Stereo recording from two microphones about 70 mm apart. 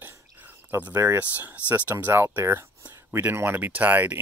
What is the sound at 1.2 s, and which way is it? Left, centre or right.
Speech, right.